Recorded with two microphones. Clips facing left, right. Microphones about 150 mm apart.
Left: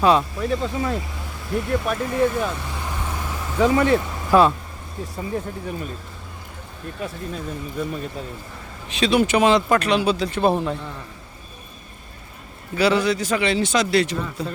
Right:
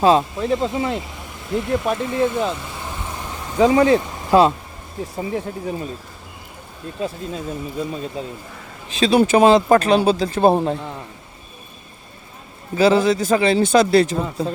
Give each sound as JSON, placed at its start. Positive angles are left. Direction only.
{"t": 0.0, "sound": "speech", "side_deg": -25}
{"t": 3.6, "sound": "speech", "side_deg": -20}
{"t": 7.0, "sound": "speech", "side_deg": -25}
{"t": 9.0, "sound": "speech", "side_deg": -35}
{"t": 12.7, "sound": "speech", "side_deg": -25}